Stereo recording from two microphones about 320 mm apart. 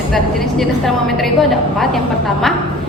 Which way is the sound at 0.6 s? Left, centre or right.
Centre.